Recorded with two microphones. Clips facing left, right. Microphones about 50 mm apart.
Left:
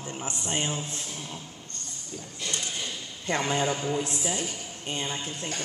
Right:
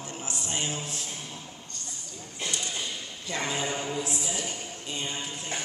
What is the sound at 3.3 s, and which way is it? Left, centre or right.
Speech, left.